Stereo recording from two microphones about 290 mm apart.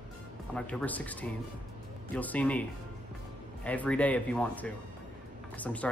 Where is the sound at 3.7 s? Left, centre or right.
Centre.